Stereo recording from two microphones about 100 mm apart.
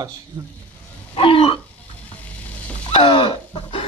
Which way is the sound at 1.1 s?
65° left (ahead or behind).